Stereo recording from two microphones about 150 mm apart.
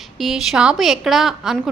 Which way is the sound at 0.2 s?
Centre (ahead or behind).